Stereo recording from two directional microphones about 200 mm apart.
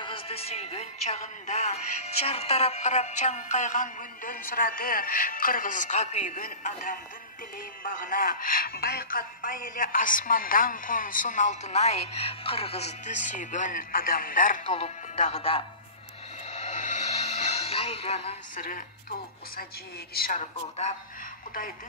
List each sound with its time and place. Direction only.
0.0 s a man's voice: 30° left (ahead or behind)
16.4 s music: 35° left (ahead or behind)
18.6 s a man's voice: 45° left (ahead or behind)